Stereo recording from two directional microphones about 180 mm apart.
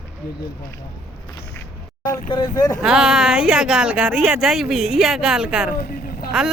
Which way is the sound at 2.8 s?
5° right (ahead or behind).